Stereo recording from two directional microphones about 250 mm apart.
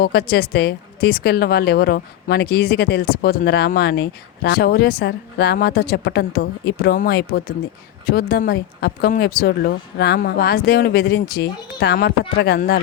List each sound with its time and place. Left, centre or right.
0.0 s a woman's voice: left